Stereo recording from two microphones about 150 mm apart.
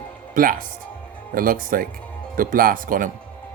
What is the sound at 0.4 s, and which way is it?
Speech, 65° right (ahead or behind).